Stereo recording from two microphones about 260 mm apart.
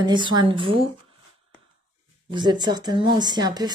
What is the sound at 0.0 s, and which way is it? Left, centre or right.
Speech, centre.